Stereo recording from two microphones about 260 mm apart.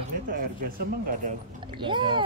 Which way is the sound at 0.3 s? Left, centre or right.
Right.